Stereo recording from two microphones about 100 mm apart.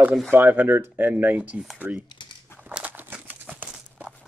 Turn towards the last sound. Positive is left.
turn(degrees=-15)  # may be behind; listen again after turning